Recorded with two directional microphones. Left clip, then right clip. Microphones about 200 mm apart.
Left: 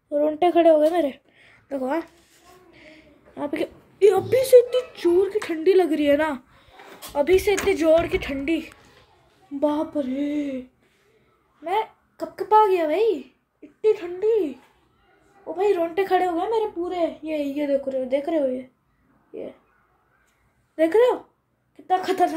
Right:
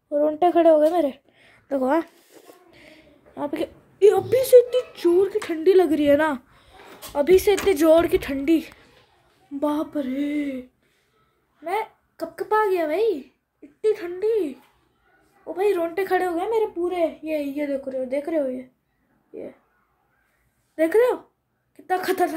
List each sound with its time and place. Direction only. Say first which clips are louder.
0.1 s a sound: right 1 dB; 10° right (ahead or behind); by 3.1 s 25° right (ahead or behind)
3.3 s a woman's voice: even; 10° right (ahead or behind)
11.6 s speech: left 2 dB; 5° right (ahead or behind)
13.7 s a woman's voice: left 2 dB; 15° right (ahead or behind)
20.7 s speech: left 1 dB; 5° right (ahead or behind)